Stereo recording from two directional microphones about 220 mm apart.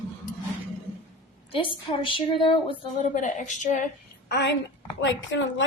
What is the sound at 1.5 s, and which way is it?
A woman's voice, 25° left (ahead or behind).